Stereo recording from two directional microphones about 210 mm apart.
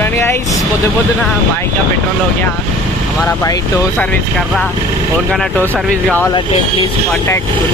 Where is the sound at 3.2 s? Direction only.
15° left (ahead or behind).